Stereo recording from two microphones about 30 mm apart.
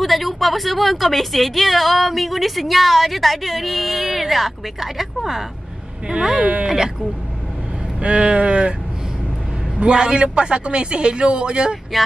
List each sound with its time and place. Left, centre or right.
0.0 s a woman's voice: centre
6.1 s speech: right
8.0 s a man's voice: right
9.8 s a man's voice: right
11.9 s a woman's voice: centre